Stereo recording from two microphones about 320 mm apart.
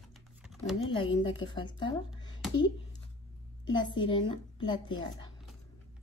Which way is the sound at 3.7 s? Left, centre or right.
Centre.